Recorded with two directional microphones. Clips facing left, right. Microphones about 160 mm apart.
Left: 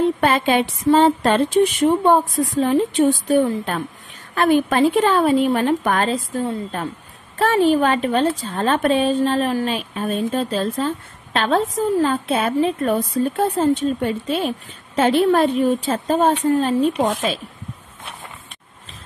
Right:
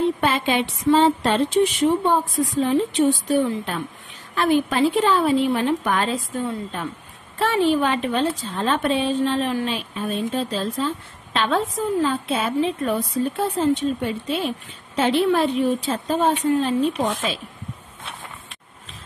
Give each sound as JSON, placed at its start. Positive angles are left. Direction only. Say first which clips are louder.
{"t": 0.2, "sound": "a woman's voice", "louder": "left 4 dB", "side_deg": 50}
{"t": 7.4, "sound": "a woman's voice", "louder": "left 3 dB", "side_deg": 45}